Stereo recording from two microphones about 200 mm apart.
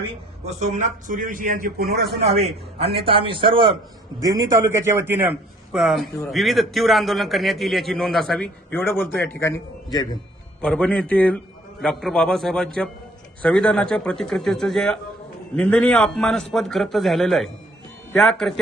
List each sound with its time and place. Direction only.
0.4 s a man's voice: 35° right (ahead or behind)
2.2 s a man's voice: 30° right (ahead or behind); by 10.2 s 20° left (ahead or behind)
10.6 s a man's voice: 5° left (ahead or behind)